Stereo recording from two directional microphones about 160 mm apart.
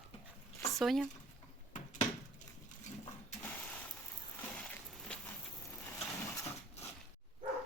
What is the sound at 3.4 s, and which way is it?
Mechanisms, 10° left (ahead or behind).